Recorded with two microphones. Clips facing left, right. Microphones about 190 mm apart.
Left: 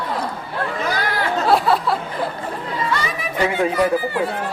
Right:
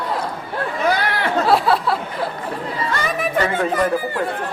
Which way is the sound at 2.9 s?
50° right (ahead or behind).